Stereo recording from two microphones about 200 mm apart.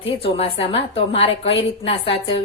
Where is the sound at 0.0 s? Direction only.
30° left (ahead or behind).